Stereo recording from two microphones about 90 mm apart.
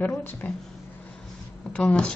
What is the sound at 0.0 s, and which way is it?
Speech, 20° left (ahead or behind).